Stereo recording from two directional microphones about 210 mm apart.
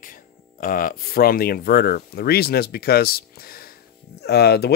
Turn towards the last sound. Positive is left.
turn(degrees=50)  # may be behind; listen again after turning